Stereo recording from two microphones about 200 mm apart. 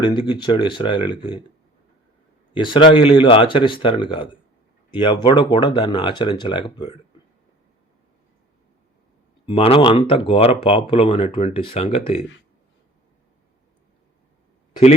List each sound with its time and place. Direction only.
0.0 s speech: 25° left (ahead or behind)
2.5 s speech: 25° left (ahead or behind)
9.5 s speech: 25° left (ahead or behind)